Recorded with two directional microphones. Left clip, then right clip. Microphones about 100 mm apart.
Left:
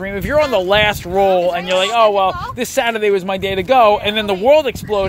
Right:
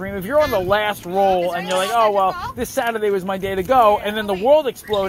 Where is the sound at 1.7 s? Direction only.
40° left (ahead or behind).